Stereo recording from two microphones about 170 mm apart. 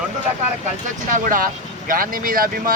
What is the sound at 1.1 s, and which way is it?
Speech, 50° right (ahead or behind).